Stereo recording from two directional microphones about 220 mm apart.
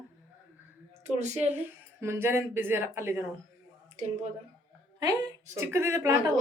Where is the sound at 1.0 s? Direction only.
30° right (ahead or behind).